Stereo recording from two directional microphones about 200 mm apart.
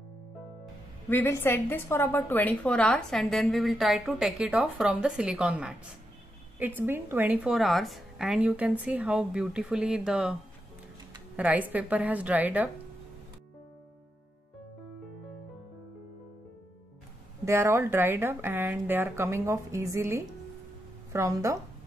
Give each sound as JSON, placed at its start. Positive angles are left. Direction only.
{"t": 1.0, "sound": "a woman's voice", "side_deg": 10}
{"t": 6.8, "sound": "a woman's voice", "side_deg": -10}
{"t": 11.3, "sound": "speech", "side_deg": -5}
{"t": 17.5, "sound": "speech", "side_deg": -15}